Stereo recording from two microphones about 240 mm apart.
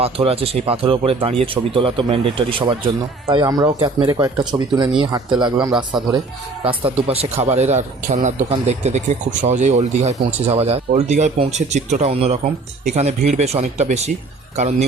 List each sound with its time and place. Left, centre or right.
0.0 s speech: right
5.5 s speech: centre
6.7 s speech: right